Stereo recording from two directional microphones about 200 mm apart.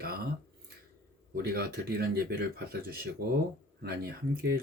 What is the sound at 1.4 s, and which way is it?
Speech, 50° right (ahead or behind).